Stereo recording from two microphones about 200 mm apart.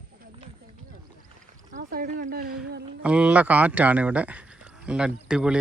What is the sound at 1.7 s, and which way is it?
Speech, 50° right (ahead or behind).